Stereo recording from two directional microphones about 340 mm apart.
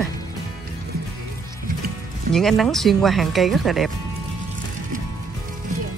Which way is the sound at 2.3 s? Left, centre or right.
Centre.